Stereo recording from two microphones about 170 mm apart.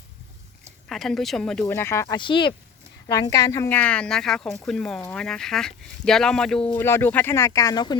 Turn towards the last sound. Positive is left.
turn(degrees=25)  # may be behind; listen again after turning